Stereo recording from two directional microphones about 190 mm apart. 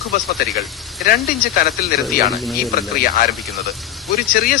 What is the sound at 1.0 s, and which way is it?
Speech, 50° left (ahead or behind).